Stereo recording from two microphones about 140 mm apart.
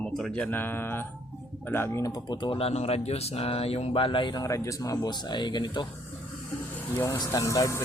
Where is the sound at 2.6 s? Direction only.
50° left (ahead or behind); by 5.8 s 30° left (ahead or behind).